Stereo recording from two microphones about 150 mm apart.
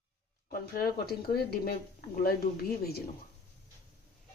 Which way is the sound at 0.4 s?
90° left.